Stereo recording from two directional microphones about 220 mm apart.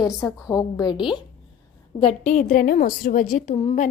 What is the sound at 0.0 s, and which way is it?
Speech, centre (ahead or behind).